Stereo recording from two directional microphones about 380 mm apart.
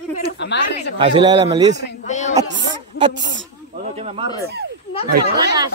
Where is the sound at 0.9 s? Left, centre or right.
Centre.